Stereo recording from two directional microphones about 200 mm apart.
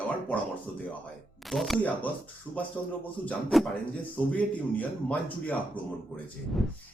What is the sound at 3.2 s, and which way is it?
Speech, centre (ahead or behind).